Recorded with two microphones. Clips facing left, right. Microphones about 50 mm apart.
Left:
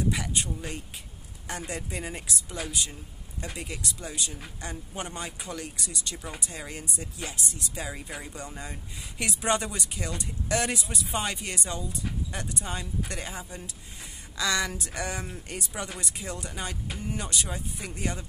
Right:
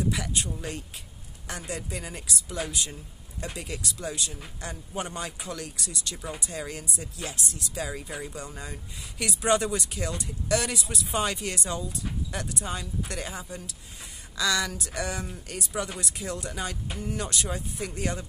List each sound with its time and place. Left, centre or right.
0.1 s speech: centre
2.5 s speech: centre
10.9 s speech: centre
15.2 s speech: left
15.5 s speech: centre